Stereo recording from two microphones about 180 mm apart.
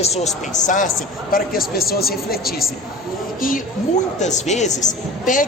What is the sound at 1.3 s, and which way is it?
Speech, 55° left (ahead or behind).